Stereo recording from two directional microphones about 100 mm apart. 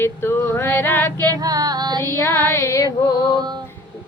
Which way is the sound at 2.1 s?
25° left (ahead or behind).